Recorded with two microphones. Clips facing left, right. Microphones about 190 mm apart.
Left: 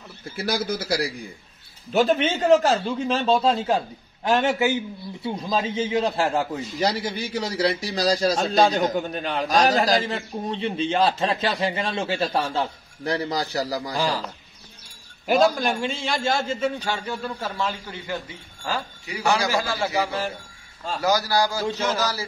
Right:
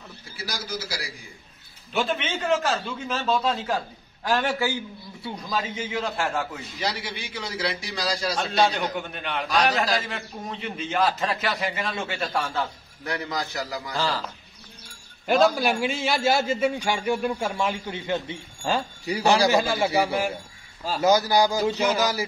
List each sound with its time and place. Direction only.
0.4 s speech: 60° left (ahead or behind)
1.9 s a man's voice: 40° left (ahead or behind)
13.9 s speech: 15° left (ahead or behind)
15.2 s a man's voice: centre (ahead or behind); by 22.2 s 15° right (ahead or behind)